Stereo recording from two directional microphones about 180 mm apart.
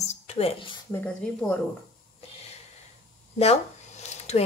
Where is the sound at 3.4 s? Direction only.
35° left (ahead or behind).